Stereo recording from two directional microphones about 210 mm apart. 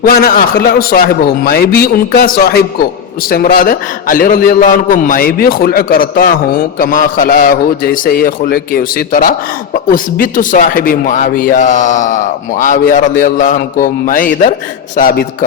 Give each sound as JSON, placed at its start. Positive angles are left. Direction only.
{"t": 0.0, "sound": "a man's voice", "side_deg": 45}